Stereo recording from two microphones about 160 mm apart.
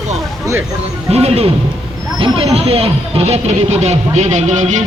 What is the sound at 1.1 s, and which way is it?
Speech, 40° right (ahead or behind).